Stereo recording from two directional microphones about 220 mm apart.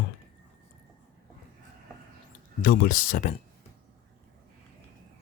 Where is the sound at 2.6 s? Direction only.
40° left (ahead or behind).